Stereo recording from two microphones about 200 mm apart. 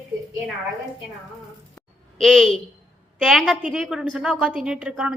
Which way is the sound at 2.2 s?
Centre (ahead or behind).